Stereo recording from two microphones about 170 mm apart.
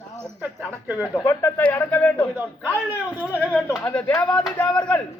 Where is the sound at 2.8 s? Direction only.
10° right (ahead or behind).